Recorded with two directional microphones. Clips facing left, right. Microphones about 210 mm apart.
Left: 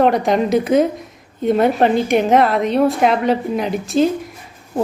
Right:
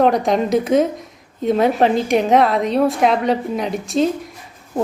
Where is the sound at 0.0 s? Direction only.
Centre (ahead or behind).